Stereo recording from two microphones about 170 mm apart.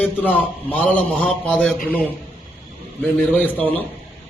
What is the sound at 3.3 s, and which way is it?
Speech, 10° left (ahead or behind).